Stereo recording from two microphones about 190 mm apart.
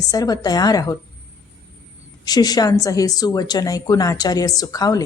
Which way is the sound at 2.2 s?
20° left (ahead or behind).